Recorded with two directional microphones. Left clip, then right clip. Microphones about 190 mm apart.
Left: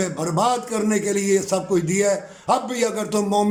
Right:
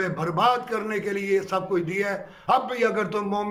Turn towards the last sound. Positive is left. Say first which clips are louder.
# left 5 dB
turn(degrees=20)  # may be behind; listen again after turning